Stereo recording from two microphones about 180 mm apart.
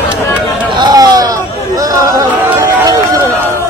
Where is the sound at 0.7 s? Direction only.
20° right (ahead or behind).